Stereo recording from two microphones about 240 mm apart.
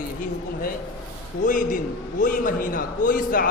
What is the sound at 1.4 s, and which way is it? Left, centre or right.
A man's voice, left.